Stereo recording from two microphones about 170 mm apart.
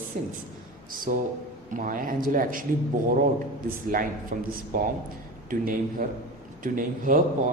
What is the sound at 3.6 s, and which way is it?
A man's voice, 55° right (ahead or behind).